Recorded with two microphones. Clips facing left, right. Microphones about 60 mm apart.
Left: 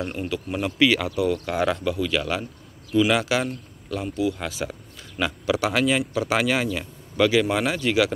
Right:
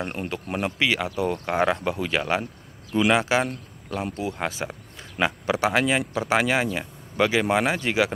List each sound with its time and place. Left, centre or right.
0.0 s speech: right; by 1.1 s centre
1.1 s speech: right
4.0 s speech: right
5.6 s speech: right